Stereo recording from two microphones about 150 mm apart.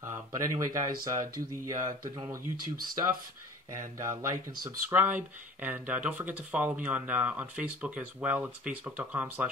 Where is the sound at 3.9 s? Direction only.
20° right (ahead or behind).